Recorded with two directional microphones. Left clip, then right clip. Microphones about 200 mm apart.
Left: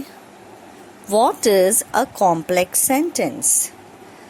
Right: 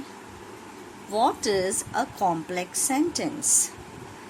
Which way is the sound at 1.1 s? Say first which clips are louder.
Left 8 dB; 40° left (ahead or behind).